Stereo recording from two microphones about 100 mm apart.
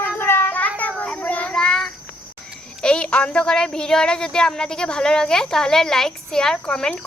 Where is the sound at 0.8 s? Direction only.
10° left (ahead or behind).